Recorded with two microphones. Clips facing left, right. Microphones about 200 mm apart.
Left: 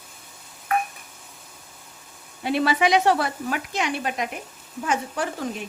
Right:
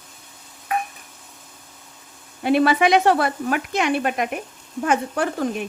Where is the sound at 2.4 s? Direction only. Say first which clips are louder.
Right 4 dB; 55° right (ahead or behind).